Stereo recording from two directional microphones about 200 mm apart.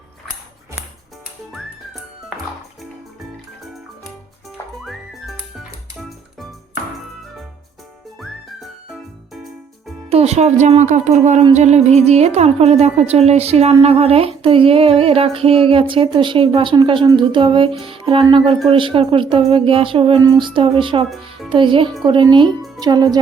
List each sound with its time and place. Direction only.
2.3 s music: 5° right (ahead or behind)
4.8 s music: centre (ahead or behind)
8.2 s music: centre (ahead or behind)
10.1 s speech: 30° right (ahead or behind)
13.8 s a sound: 30° right (ahead or behind)